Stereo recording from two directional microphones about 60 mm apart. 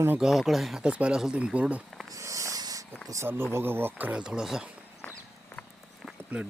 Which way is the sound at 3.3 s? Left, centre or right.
Right.